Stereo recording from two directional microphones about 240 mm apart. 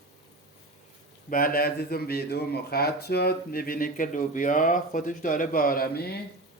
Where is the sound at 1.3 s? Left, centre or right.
Left.